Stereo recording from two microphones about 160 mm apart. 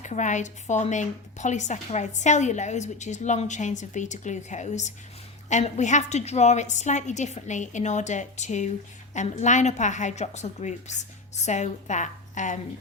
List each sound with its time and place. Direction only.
0.0 s speech: 50° left (ahead or behind)